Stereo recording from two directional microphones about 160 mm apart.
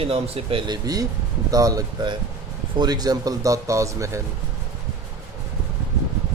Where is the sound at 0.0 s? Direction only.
35° right (ahead or behind).